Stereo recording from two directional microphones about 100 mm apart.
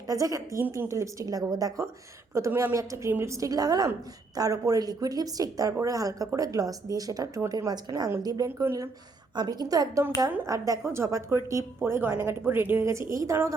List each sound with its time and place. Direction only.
0.1 s speech: 35° right (ahead or behind)
2.5 s a woman's voice: 20° right (ahead or behind)
2.7 s speech: 30° right (ahead or behind)
9.3 s a woman's voice: 45° right (ahead or behind)